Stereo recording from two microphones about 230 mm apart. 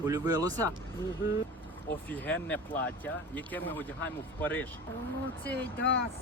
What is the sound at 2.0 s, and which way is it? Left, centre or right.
Speech, centre.